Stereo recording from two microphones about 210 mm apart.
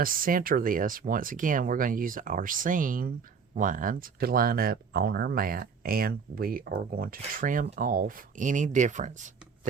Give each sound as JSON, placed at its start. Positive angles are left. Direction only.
{"t": 0.0, "sound": "speech", "side_deg": -40}